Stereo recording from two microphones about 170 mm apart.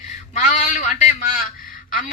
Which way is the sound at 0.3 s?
50° left (ahead or behind).